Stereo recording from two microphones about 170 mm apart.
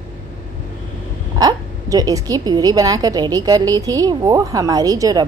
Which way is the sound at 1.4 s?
20° right (ahead or behind).